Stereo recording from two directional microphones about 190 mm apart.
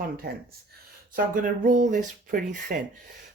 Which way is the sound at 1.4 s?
45° right (ahead or behind).